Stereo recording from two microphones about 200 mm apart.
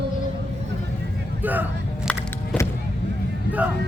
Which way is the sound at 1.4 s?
10° right (ahead or behind).